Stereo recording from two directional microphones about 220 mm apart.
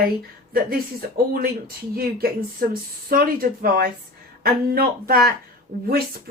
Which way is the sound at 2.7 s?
40° right (ahead or behind).